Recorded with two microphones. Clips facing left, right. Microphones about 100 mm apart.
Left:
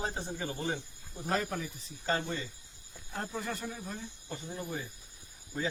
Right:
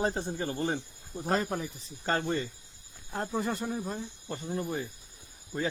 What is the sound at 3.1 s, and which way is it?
Speech, 30° right (ahead or behind).